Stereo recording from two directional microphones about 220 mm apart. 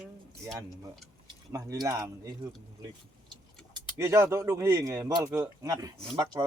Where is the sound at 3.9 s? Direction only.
15° right (ahead or behind).